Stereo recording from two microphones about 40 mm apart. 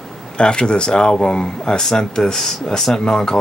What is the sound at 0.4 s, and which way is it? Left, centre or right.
Speech, left.